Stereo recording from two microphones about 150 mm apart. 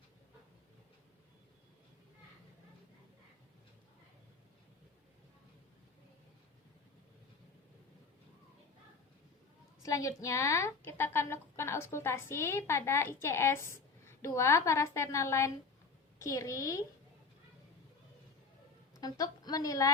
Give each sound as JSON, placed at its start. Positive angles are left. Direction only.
{"t": 9.8, "sound": "a woman's voice", "side_deg": 20}
{"t": 18.9, "sound": "a woman's voice", "side_deg": 25}